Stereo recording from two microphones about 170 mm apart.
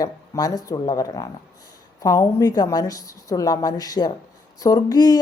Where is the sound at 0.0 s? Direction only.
20° left (ahead or behind).